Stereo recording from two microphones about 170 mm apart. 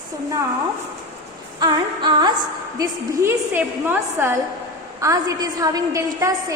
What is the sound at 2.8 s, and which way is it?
A woman's voice, 15° right (ahead or behind).